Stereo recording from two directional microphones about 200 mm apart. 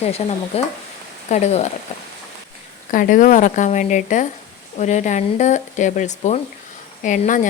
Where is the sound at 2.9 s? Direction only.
40° left (ahead or behind).